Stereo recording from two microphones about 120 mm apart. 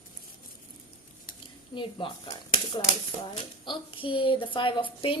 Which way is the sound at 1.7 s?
40° left (ahead or behind).